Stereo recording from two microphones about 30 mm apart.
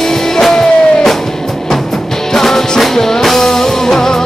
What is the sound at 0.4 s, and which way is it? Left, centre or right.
Music, centre.